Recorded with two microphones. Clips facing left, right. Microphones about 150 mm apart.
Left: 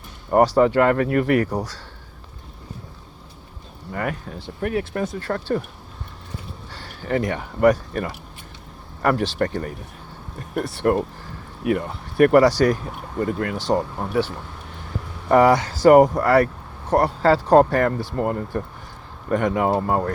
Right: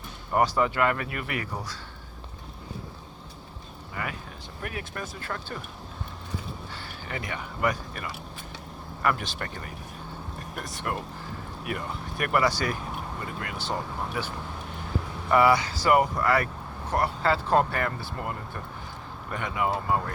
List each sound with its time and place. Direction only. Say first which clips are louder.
0.3 s speech: left 8 dB; 35° left (ahead or behind)
3.9 s speech: left 9 dB; 50° left (ahead or behind)
4.4 s speech: left 13 dB; 30° left (ahead or behind)
5.2 s speech: left 12 dB; 40° left (ahead or behind)
7.0 s speech: left 13 dB; 45° left (ahead or behind)
10.6 s speech: left 13 dB; 30° left (ahead or behind)
12.2 s speech: left 12 dB; 40° left (ahead or behind)
13.1 s speech: left 12 dB; 50° left (ahead or behind)
13.7 s speech: left 8 dB; 35° left (ahead or behind)